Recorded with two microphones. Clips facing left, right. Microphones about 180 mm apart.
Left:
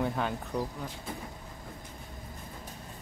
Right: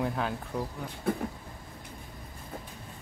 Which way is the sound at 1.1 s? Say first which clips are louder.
Right 15 dB; 60° right (ahead or behind).